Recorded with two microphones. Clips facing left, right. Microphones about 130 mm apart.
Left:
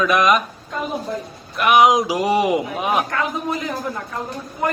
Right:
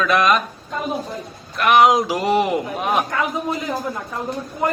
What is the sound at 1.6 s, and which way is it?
Speech, 10° left (ahead or behind).